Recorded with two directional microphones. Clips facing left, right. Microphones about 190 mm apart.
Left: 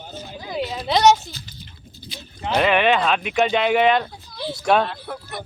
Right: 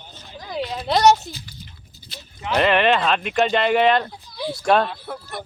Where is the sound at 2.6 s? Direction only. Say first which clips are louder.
Even; centre (ahead or behind).